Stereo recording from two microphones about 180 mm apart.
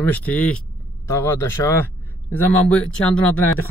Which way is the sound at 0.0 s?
10° left (ahead or behind).